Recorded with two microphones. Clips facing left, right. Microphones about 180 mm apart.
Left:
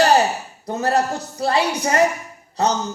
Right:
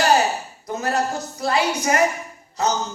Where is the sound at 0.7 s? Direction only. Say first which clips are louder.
Left 3 dB; 35° left (ahead or behind).